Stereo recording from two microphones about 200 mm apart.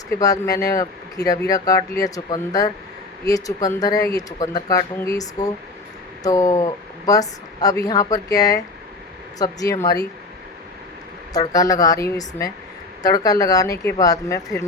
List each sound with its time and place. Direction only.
0.2 s speech: 15° left (ahead or behind)
11.3 s speech: 20° left (ahead or behind)